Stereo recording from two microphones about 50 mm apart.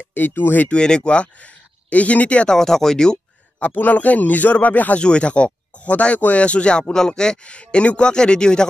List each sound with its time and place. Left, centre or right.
0.1 s speech: left
0.7 s speech: centre
2.5 s speech: centre
3.5 s speech: left
5.0 s speech: left